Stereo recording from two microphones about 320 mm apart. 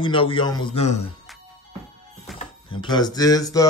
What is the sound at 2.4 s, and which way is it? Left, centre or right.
Speech, centre.